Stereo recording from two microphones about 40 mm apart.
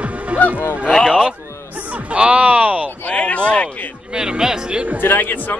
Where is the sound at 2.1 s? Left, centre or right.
Right.